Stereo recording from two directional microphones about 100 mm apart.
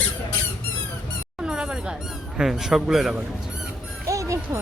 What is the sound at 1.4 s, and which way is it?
Squeak, 10° right (ahead or behind).